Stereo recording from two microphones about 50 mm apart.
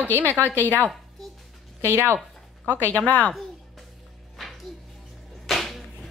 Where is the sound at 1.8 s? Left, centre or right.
Right.